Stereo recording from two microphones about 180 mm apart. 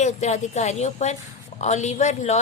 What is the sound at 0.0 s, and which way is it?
A woman's voice, 40° left (ahead or behind).